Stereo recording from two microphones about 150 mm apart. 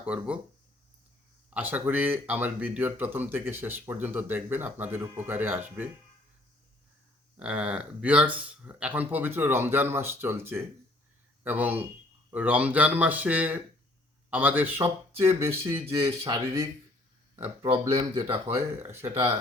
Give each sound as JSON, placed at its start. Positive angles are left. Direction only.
{"t": 0.0, "sound": "speech", "side_deg": -10}
{"t": 1.5, "sound": "speech", "side_deg": -10}
{"t": 7.3, "sound": "speech", "side_deg": -10}
{"t": 17.7, "sound": "speech", "side_deg": -40}
{"t": 18.4, "sound": "speech", "side_deg": -15}